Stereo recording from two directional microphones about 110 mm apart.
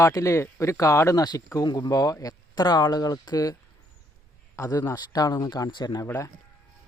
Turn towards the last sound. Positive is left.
turn(degrees=20)  # may be behind; listen again after turning